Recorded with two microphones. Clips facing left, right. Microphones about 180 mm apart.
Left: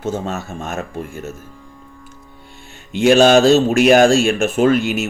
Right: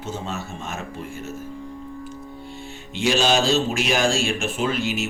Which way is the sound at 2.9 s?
55° left (ahead or behind).